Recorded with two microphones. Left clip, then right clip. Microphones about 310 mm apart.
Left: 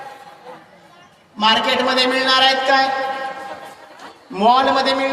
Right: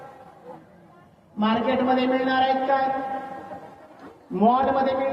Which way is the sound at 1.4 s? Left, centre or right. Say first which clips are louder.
Left 8 dB; left.